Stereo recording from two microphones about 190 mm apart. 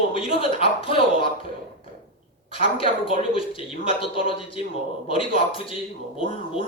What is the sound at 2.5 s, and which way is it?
Speech, 30° left (ahead or behind).